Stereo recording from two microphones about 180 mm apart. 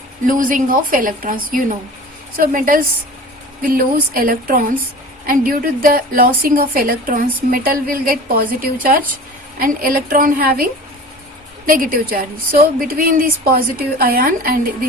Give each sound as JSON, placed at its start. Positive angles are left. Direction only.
{"t": 0.3, "sound": "a woman's voice", "side_deg": -50}